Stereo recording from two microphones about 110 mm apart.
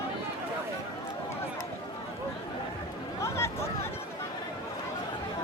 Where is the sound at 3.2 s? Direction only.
25° left (ahead or behind).